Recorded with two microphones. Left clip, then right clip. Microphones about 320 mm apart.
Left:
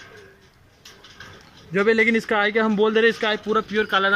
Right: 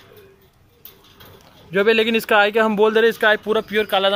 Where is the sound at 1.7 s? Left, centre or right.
Right.